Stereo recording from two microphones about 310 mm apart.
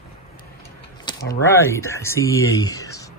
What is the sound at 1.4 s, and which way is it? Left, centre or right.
Speech, centre.